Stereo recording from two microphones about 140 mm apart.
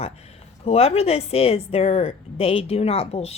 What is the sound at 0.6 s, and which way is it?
A woman's voice, 45° left (ahead or behind).